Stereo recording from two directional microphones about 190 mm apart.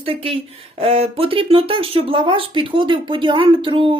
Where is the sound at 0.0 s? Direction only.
30° right (ahead or behind).